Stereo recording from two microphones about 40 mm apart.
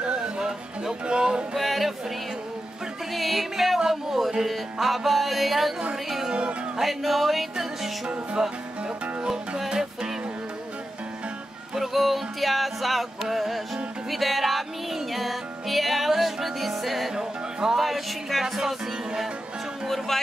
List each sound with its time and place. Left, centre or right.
0.0 s music: right
1.5 s music: centre
3.1 s music: centre
3.8 s a sound: centre
4.5 s music: centre
6.0 s speech: centre
6.8 s music: centre
8.4 s speech: centre
11.7 s music: centre
17.1 s music: centre
17.7 s music: centre